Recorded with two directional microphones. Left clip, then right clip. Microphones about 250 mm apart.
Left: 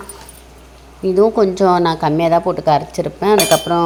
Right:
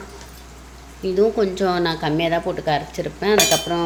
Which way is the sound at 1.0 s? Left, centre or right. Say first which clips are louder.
Left 5 dB; left.